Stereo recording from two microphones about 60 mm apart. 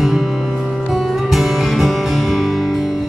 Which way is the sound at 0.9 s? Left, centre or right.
Centre.